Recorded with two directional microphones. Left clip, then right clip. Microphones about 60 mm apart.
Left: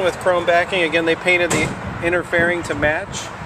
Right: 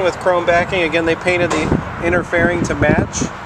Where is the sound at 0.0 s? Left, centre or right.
Right.